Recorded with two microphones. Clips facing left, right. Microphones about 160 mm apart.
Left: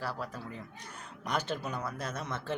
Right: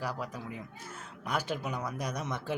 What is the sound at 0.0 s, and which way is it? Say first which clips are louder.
Speech: right 1 dB; 15° right (ahead or behind).